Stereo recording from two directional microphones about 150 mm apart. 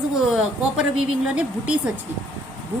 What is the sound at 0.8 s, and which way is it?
Speech, 5° right (ahead or behind).